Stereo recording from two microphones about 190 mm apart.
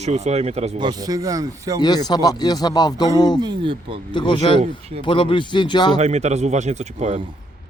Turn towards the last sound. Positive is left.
turn(degrees=-35)  # may be behind; listen again after turning